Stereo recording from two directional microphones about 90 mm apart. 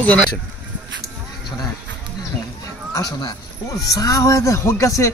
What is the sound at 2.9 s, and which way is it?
Speech, 45° left (ahead or behind).